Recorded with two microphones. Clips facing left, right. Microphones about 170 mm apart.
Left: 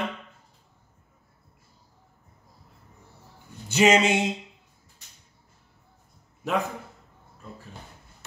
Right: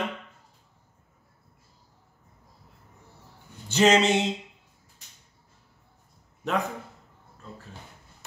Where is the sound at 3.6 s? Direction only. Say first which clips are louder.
Even; 10° left (ahead or behind).